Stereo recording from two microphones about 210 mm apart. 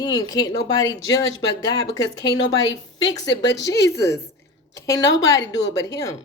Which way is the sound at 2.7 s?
65° left (ahead or behind).